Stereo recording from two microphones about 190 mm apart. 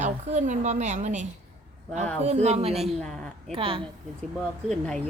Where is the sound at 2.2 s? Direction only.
35° right (ahead or behind).